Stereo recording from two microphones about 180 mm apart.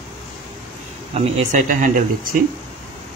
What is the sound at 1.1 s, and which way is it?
Speech, 35° right (ahead or behind).